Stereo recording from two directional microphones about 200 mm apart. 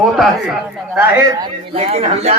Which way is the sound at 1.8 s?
30° right (ahead or behind).